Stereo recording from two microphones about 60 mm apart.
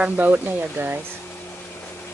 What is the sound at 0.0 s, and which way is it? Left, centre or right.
Speech, right.